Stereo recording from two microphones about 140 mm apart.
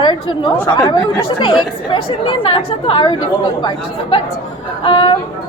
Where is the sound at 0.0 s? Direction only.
35° left (ahead or behind).